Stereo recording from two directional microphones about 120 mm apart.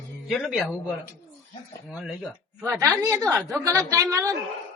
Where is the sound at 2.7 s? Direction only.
25° right (ahead or behind).